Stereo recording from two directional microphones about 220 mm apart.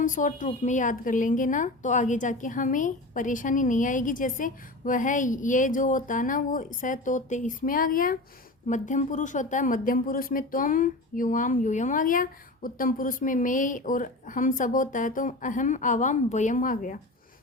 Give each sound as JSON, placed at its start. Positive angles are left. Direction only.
{"t": 0.0, "sound": "a woman's voice", "side_deg": 35}